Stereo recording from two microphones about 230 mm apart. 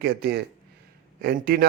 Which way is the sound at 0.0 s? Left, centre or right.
Right.